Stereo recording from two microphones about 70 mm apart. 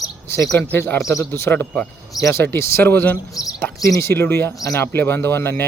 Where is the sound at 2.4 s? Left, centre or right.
Left.